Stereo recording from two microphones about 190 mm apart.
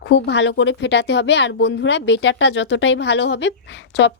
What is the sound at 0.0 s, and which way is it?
Speech, 70° left (ahead or behind).